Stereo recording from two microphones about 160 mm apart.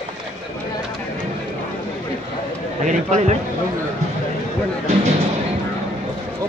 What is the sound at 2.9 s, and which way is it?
Speech, 50° right (ahead or behind).